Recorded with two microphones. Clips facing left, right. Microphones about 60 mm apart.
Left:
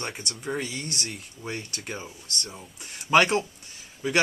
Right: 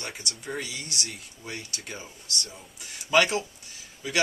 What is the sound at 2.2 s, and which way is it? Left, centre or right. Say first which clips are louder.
Speech: left 1 dB; left.